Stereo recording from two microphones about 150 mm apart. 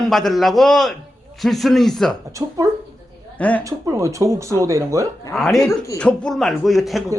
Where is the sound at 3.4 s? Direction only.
10° left (ahead or behind).